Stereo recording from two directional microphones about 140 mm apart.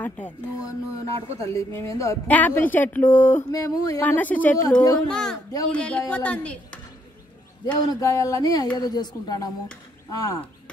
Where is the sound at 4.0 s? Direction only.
10° left (ahead or behind).